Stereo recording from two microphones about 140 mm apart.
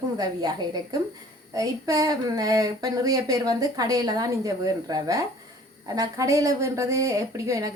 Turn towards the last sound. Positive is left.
turn(degrees=-25)  # may be behind; listen again after turning